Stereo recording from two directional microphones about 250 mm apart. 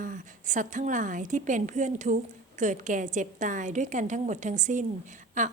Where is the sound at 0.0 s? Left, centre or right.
Right.